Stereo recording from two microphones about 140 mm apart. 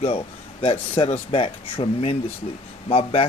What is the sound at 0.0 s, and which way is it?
A man's voice, 40° left (ahead or behind).